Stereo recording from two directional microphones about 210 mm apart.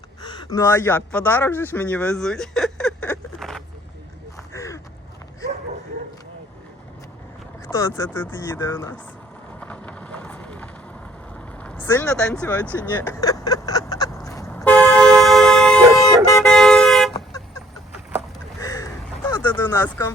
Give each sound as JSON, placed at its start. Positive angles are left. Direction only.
{"t": 0.2, "sound": "speech", "side_deg": 20}
{"t": 4.5, "sound": "gasp", "side_deg": 15}
{"t": 7.7, "sound": "speech", "side_deg": 15}
{"t": 9.6, "sound": "a sound", "side_deg": 5}
{"t": 11.6, "sound": "speech", "side_deg": 5}
{"t": 14.3, "sound": "vehicle", "side_deg": 15}
{"t": 18.6, "sound": "a sound", "side_deg": 15}